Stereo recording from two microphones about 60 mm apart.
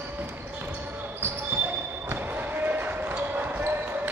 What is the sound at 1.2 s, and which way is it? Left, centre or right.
Basketball bounce, right.